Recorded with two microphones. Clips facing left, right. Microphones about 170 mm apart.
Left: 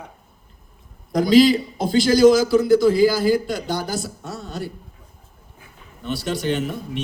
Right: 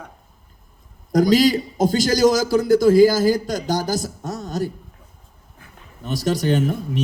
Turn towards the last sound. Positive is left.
turn(degrees=-40)  # may be behind; listen again after turning